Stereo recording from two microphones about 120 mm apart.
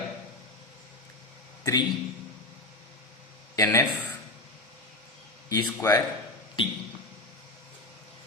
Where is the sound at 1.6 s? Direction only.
30° left (ahead or behind).